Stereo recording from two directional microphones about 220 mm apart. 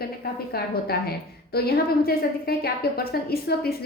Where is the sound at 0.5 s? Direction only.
45° left (ahead or behind).